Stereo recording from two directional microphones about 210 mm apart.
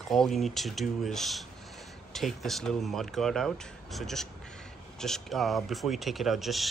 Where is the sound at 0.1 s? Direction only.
Centre (ahead or behind).